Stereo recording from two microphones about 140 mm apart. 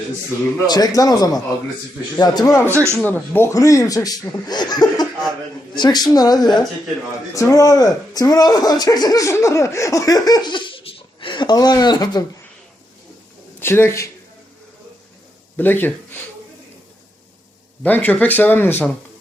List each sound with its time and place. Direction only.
0.7 s speech: 25° left (ahead or behind)
2.6 s a man's voice: 20° right (ahead or behind)
3.0 s a woman's voice: 15° left (ahead or behind)
13.6 s speech: 15° left (ahead or behind)
15.5 s speech: 15° left (ahead or behind)
17.8 s speech: 10° left (ahead or behind)